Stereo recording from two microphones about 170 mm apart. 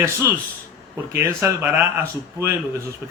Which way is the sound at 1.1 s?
15° right (ahead or behind).